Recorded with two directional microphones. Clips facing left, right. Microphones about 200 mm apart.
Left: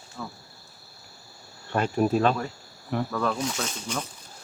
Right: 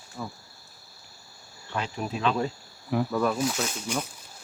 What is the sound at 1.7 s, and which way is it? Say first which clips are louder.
Speech: left 9 dB; 50° left (ahead or behind).